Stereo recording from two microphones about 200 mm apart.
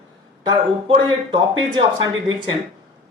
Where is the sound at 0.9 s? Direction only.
25° right (ahead or behind).